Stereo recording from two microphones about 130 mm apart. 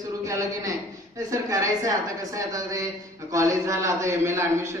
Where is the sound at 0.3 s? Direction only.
25° right (ahead or behind).